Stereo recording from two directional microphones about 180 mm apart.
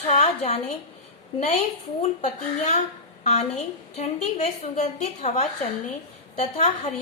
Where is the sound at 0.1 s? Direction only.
40° left (ahead or behind).